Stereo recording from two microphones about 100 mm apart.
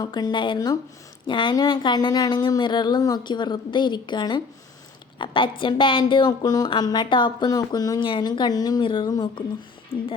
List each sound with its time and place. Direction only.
0.0 s a woman's voice: 45° left (ahead or behind)
8.8 s speech: 55° left (ahead or behind)
9.9 s speech: 80° left